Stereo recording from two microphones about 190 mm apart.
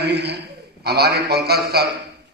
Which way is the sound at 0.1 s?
60° right (ahead or behind).